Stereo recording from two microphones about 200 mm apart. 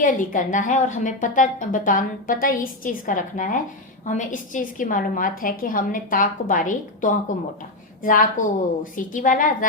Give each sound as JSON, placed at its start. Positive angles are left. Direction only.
{"t": 0.0, "sound": "a woman's voice", "side_deg": 40}